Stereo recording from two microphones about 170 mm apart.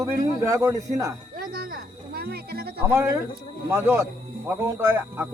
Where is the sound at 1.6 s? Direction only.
60° right (ahead or behind).